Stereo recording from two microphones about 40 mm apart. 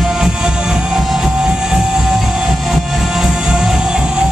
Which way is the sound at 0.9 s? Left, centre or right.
Centre.